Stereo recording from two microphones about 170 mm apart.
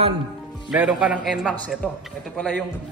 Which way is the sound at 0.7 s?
5° right (ahead or behind).